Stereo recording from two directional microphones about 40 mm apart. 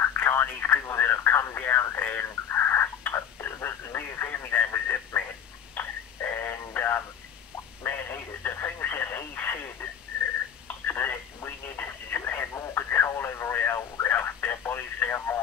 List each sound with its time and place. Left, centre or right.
0.2 s speech: left
1.6 s speech: left
2.0 s a sound: left
3.1 s radio: left
5.8 s a sound: left
7.8 s radio: left